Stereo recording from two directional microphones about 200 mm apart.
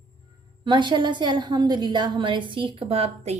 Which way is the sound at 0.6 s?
25° right (ahead or behind).